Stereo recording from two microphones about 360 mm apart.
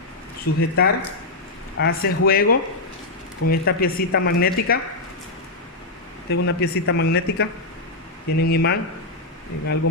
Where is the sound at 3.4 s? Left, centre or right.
Left.